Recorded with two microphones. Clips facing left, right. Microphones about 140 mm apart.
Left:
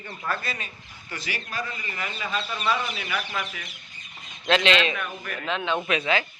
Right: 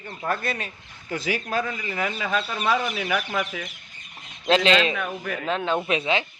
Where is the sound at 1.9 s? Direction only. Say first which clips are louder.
Right 6 dB; 90° right.